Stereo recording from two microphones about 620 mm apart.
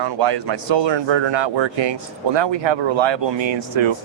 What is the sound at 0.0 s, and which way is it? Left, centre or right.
Speech, right.